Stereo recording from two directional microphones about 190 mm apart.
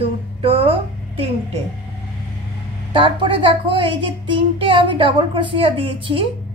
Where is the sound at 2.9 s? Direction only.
25° right (ahead or behind).